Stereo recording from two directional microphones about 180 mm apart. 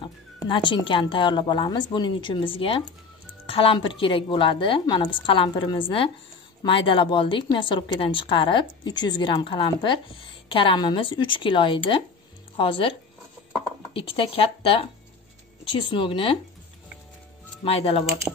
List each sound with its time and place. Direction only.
0.0 s a woman's voice: 25° left (ahead or behind)
13.9 s a woman's voice: 30° left (ahead or behind)
17.6 s speech: 35° left (ahead or behind)